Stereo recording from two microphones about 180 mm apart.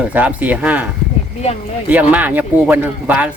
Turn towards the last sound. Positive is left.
turn(degrees=-10)  # may be behind; listen again after turning